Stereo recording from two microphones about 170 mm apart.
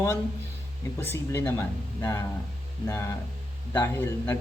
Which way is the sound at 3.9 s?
10° left (ahead or behind).